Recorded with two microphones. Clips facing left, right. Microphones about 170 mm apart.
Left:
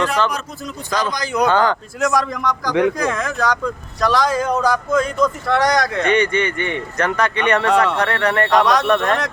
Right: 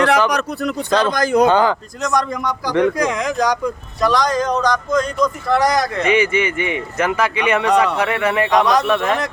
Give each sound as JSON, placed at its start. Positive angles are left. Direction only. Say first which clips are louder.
{"t": 0.3, "sound": "speech", "louder": "right 7 dB", "side_deg": -70}
{"t": 1.1, "sound": "speech", "louder": "right 7 dB", "side_deg": -50}
{"t": 1.4, "sound": "speech", "louder": "right 2 dB", "side_deg": -15}
{"t": 2.0, "sound": "speech", "louder": "left 3 dB", "side_deg": 0}
{"t": 3.0, "sound": "speech", "louder": "right 2 dB", "side_deg": -15}
{"t": 4.0, "sound": "speech", "louder": "right 1 dB", "side_deg": 0}